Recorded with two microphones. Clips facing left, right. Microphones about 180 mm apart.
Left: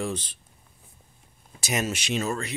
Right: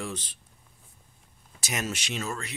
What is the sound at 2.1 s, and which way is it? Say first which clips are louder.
Speech: left 6 dB; 25° left (ahead or behind).